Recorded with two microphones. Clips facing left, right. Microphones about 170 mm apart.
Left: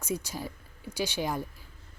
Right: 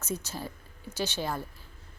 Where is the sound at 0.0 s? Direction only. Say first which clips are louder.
Left 2 dB; 10° left (ahead or behind).